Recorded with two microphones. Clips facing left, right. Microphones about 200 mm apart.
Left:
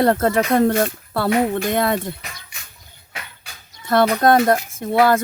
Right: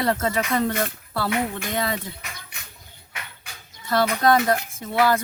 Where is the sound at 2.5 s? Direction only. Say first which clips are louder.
Even; 60° right (ahead or behind).